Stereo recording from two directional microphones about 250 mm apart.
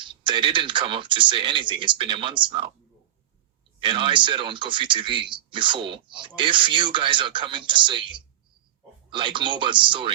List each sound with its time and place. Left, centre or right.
0.0 s speech: centre
3.8 s speech: right